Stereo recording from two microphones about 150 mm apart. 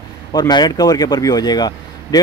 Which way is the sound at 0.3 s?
30° left (ahead or behind).